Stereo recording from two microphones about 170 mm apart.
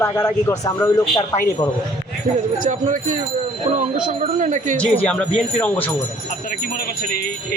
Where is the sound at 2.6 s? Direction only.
50° right (ahead or behind).